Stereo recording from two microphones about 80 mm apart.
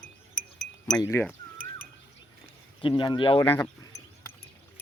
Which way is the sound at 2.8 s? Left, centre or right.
Left.